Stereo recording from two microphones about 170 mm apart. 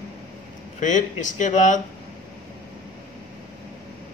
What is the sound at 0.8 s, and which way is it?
Speech, 45° left (ahead or behind).